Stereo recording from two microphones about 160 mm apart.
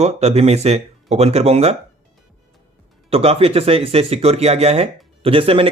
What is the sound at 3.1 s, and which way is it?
Speech, 40° right (ahead or behind).